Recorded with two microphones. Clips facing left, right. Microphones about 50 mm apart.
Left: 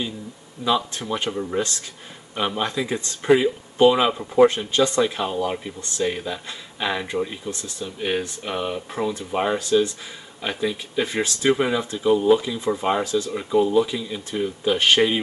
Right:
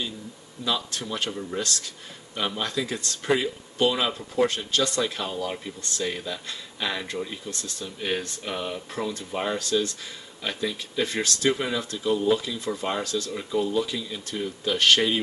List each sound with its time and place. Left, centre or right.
0.7 s speech: centre